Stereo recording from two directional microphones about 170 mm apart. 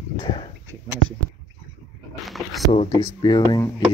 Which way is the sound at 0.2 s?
30° left (ahead or behind).